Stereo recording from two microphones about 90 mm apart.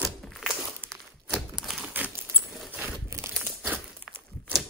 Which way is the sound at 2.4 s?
Centre (ahead or behind).